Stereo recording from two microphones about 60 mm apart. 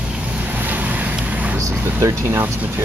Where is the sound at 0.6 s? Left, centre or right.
Right.